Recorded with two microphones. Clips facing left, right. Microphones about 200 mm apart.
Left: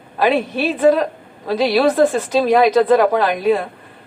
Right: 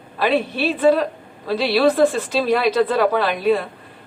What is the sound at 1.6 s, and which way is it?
A woman's voice, 45° left (ahead or behind).